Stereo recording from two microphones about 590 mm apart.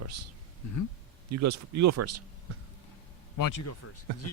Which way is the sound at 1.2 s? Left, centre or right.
Right.